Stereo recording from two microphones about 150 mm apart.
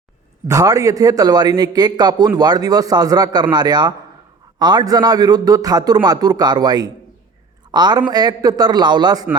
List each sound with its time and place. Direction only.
0.4 s a man's voice: 25° right (ahead or behind)